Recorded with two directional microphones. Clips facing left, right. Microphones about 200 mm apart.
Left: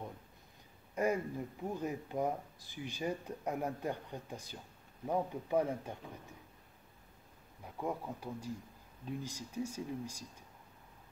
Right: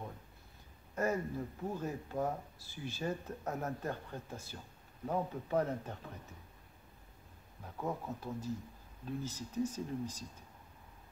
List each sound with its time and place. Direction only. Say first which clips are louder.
0.9 s speech: left 1 dB; 15° left (ahead or behind)
7.6 s speech: even; 15° left (ahead or behind)